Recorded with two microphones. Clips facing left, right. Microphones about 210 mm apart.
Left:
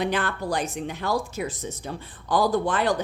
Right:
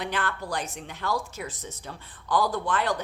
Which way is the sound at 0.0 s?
15° left (ahead or behind).